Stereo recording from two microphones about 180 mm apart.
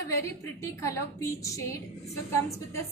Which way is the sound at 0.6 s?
15° left (ahead or behind).